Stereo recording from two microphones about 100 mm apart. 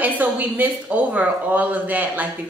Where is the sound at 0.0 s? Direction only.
15° right (ahead or behind).